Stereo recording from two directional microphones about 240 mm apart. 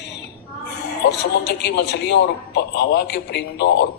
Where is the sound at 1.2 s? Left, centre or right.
Left.